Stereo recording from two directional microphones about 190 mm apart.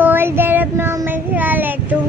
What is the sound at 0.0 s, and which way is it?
Child singing, 10° right (ahead or behind).